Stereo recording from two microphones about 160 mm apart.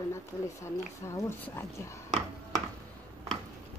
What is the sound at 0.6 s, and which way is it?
Speech, 15° left (ahead or behind).